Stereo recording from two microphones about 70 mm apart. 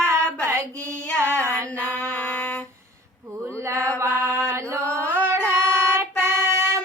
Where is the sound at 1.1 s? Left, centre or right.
Right.